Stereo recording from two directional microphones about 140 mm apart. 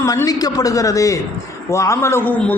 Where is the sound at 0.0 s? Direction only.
25° left (ahead or behind).